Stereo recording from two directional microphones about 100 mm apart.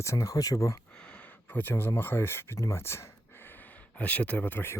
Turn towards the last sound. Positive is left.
turn(degrees=20)  # may be behind; listen again after turning